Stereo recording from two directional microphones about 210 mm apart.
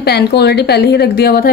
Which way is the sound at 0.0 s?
50° left (ahead or behind).